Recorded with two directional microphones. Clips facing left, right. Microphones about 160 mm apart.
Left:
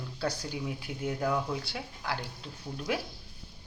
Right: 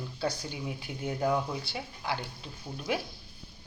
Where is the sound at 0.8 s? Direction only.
5° left (ahead or behind).